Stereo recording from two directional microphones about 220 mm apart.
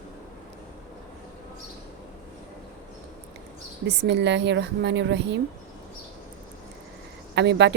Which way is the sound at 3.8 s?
50° right (ahead or behind).